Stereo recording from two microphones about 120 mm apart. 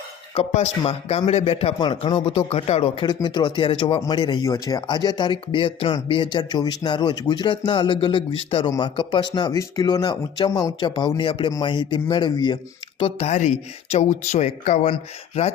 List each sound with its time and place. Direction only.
0.3 s a man's voice: 65° left (ahead or behind)
1.8 s speech: 45° left (ahead or behind)
3.1 s speech: 35° left (ahead or behind)
4.4 s speech: 30° left (ahead or behind)
13.0 s speech: 55° left (ahead or behind); by 14.8 s 80° left